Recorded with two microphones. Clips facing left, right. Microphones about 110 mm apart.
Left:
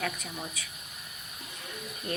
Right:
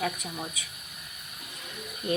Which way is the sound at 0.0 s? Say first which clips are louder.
Right 3 dB; 15° right (ahead or behind).